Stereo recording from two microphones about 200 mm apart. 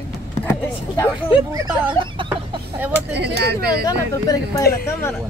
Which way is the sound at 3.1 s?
55° right (ahead or behind).